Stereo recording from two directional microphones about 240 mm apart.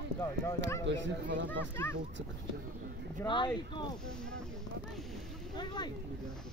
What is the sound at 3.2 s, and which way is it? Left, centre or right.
Speech, centre.